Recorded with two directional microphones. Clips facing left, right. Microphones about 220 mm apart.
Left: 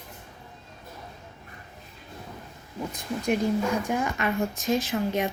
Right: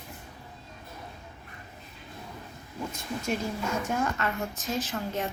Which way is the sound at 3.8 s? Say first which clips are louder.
Left 2 dB; 15° left (ahead or behind).